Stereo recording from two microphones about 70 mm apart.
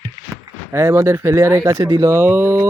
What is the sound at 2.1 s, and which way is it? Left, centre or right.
Speech, right.